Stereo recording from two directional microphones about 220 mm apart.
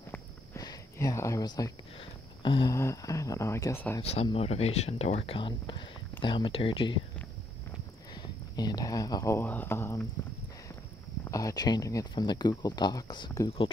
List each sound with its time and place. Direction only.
0.1 s speech: 15° left (ahead or behind)
4.0 s speech: 30° left (ahead or behind)
8.1 s speech: 20° left (ahead or behind)
11.2 s speech: 15° left (ahead or behind)